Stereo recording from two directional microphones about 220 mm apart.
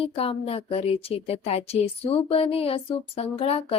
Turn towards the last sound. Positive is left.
turn(degrees=25)  # may be behind; listen again after turning